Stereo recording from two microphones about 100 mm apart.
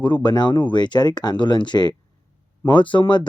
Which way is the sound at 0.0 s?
50° left (ahead or behind).